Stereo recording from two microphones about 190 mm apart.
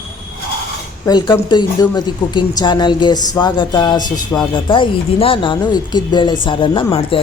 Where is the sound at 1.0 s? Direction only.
20° left (ahead or behind).